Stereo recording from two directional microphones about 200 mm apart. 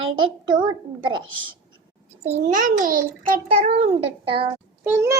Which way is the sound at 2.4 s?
40° right (ahead or behind).